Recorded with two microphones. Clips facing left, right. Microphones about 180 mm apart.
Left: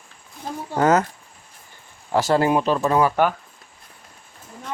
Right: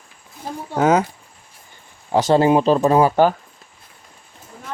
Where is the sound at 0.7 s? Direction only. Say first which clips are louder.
Right 1 dB; 10° right (ahead or behind).